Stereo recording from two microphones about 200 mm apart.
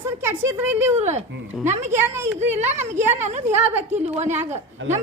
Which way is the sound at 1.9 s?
10° right (ahead or behind).